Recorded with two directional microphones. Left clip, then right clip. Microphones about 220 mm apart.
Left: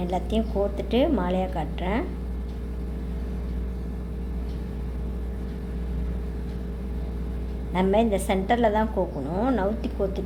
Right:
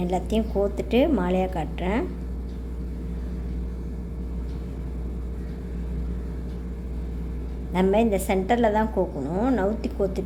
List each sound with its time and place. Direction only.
0.0 s a woman's voice: 10° right (ahead or behind)
7.7 s a woman's voice: 10° right (ahead or behind)